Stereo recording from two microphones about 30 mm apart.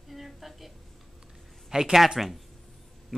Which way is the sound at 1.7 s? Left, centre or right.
Centre.